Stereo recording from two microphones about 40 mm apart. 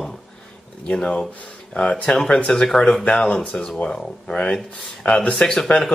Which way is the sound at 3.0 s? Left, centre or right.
Left.